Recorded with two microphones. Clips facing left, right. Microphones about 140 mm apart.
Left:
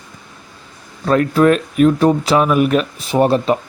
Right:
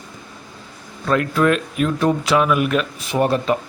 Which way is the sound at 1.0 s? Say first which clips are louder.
Left 5 dB; 35° left (ahead or behind).